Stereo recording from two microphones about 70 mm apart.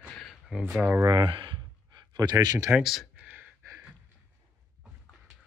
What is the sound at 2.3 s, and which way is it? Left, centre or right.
Speech, right.